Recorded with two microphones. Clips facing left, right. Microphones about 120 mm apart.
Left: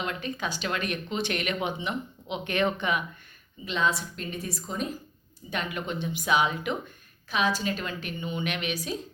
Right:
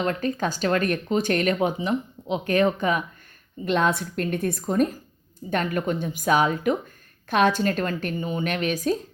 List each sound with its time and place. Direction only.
0.0 s speech: 45° right (ahead or behind)
3.6 s a woman's voice: 55° right (ahead or behind)